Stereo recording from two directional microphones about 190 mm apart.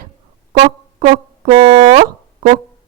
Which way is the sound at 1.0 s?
40° right (ahead or behind).